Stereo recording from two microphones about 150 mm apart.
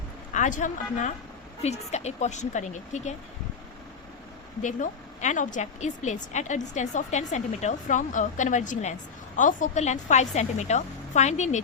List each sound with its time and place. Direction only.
0.3 s speech: 55° left (ahead or behind)
4.6 s speech: 55° left (ahead or behind)